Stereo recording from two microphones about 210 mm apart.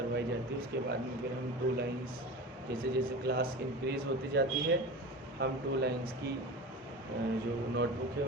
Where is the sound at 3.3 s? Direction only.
50° right (ahead or behind).